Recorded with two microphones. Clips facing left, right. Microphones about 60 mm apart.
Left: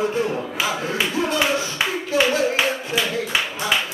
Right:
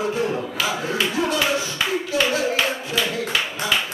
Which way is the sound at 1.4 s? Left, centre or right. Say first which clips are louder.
Left 1 dB; centre.